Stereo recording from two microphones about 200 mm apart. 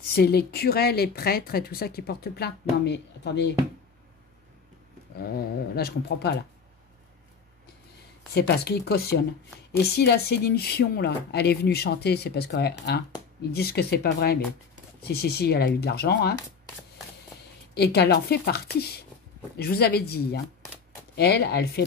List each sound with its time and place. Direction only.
0.0 s speech: 50° left (ahead or behind)
5.8 s speech: 55° left (ahead or behind)
8.4 s speech: 55° left (ahead or behind)
17.7 s speech: 55° left (ahead or behind)